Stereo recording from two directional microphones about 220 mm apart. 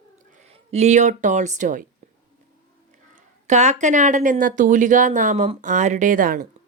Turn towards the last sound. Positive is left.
turn(degrees=-40)  # may be behind; listen again after turning